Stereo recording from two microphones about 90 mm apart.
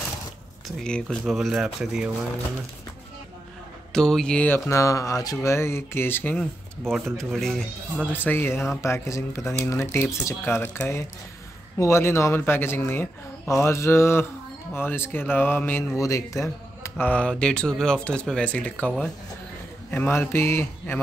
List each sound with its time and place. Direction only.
0.7 s speech: 5° left (ahead or behind)
3.9 s speech: 5° left (ahead or behind)
4.5 s speech: 30° left (ahead or behind)
6.3 s speech: 5° left (ahead or behind)
8.1 s speech: 20° left (ahead or behind)
16.0 s speech: 35° left (ahead or behind)
17.0 s speech: 15° left (ahead or behind)
19.9 s speech: 25° left (ahead or behind)